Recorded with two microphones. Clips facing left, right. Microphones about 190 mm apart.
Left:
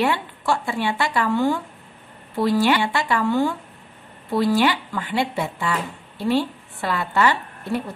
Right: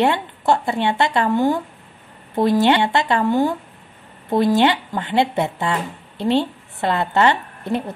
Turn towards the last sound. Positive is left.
turn(degrees=-20)  # may be behind; listen again after turning